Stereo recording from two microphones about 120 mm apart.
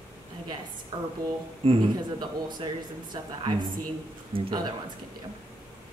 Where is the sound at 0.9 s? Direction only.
30° right (ahead or behind).